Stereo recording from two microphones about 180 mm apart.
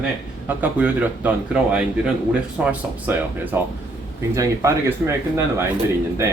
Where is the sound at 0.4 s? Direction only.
10° right (ahead or behind).